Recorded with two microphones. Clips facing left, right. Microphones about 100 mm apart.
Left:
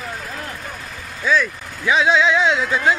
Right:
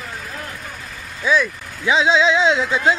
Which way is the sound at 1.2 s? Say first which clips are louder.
Right 1 dB; 15° right (ahead or behind).